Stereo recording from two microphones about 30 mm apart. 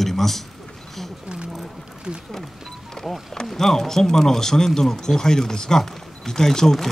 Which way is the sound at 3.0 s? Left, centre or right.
Centre.